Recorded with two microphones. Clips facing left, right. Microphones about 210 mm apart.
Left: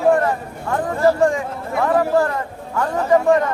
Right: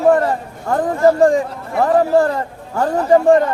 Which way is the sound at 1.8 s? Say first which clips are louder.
Right 4 dB; 35° right (ahead or behind).